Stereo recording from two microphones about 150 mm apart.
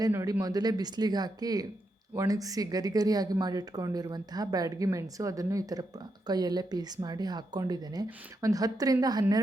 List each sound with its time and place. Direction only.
0.0 s speech: 20° right (ahead or behind)